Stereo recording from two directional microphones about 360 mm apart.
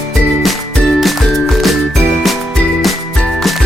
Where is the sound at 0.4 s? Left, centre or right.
Centre.